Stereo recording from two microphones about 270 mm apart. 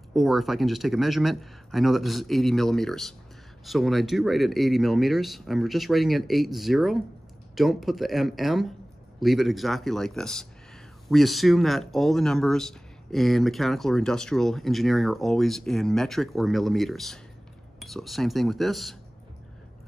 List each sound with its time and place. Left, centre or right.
0.1 s speech: centre